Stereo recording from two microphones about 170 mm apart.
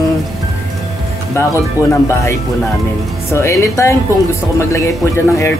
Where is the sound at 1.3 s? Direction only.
15° left (ahead or behind).